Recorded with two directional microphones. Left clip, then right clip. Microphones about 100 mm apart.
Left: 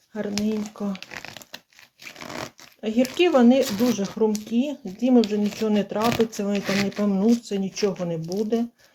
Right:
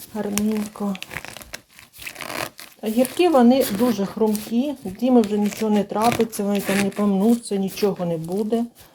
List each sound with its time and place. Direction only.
0.4 s speech: 15° right (ahead or behind)
2.1 s speech: 15° right (ahead or behind)
5.4 s speech: 15° left (ahead or behind)
5.6 s speech: 15° right (ahead or behind)
6.0 s speech: 10° left (ahead or behind)
6.5 s speech: 30° right (ahead or behind)
7.0 s speech: 10° right (ahead or behind)